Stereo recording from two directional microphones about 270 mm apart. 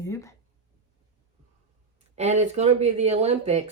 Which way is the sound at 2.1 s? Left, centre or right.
Right.